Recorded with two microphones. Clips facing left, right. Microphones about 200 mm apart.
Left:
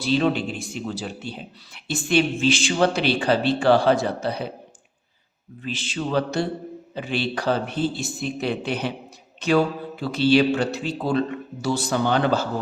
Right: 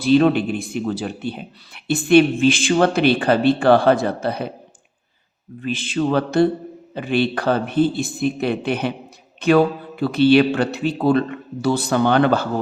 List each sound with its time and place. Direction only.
0.0 s a man's voice: 55° right (ahead or behind)
5.6 s a man's voice: 55° right (ahead or behind)